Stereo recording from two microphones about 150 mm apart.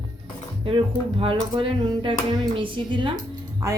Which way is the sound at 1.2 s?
35° right (ahead or behind).